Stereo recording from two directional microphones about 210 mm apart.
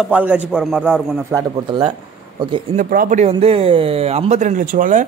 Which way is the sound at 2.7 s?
40° right (ahead or behind).